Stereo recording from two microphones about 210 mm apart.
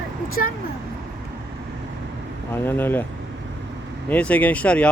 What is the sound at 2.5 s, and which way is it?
Speech, 10° left (ahead or behind).